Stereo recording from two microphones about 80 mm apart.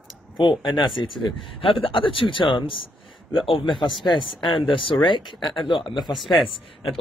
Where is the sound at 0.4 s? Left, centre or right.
Left.